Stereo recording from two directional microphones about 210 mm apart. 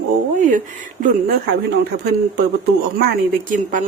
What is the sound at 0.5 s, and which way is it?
Speech, 40° right (ahead or behind).